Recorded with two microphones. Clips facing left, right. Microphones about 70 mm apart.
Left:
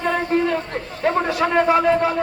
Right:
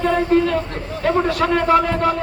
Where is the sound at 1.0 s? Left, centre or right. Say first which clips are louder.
Right 2 dB; centre.